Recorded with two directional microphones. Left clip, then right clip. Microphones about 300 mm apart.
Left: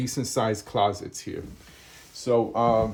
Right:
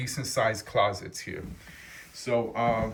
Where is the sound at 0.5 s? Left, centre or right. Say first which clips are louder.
Left 2 dB; centre.